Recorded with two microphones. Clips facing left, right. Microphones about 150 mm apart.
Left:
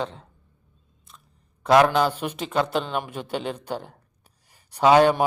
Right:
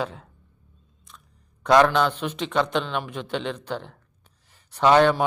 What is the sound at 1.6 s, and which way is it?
A man's voice, 5° left (ahead or behind).